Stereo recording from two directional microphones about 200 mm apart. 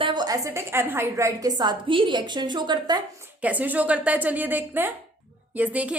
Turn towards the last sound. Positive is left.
turn(degrees=-5)  # may be behind; listen again after turning